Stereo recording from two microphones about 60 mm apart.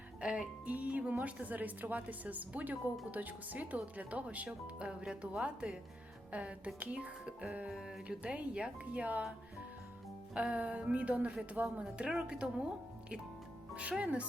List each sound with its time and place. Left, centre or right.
0.2 s a woman's voice: centre
7.7 s speech: centre
8.0 s a woman's voice: centre
10.3 s a woman's voice: right
14.0 s a woman's voice: right